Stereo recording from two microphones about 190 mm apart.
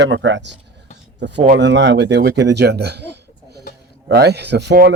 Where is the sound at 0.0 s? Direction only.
70° right (ahead or behind).